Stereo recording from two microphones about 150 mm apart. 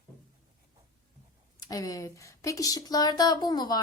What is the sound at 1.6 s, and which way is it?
Speech, 25° left (ahead or behind).